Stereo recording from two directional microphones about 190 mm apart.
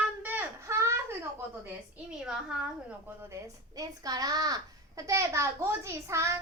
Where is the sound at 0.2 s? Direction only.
10° right (ahead or behind).